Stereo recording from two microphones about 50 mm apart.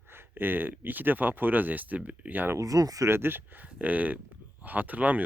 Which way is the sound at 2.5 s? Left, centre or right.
Right.